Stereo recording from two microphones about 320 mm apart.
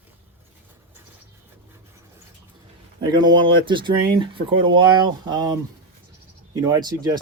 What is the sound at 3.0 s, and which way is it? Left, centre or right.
Speech, centre.